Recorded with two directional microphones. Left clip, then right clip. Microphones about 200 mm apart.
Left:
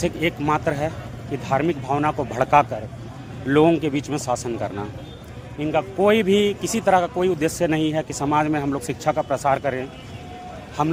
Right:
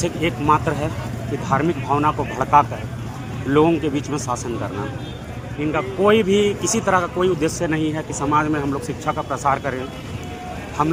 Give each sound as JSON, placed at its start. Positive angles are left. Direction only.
{"t": 0.0, "sound": "speech", "side_deg": 50}